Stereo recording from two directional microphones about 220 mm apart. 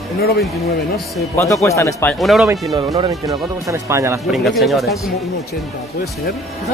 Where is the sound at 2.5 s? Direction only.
15° right (ahead or behind).